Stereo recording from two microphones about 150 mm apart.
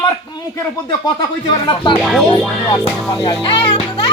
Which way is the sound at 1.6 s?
35° left (ahead or behind).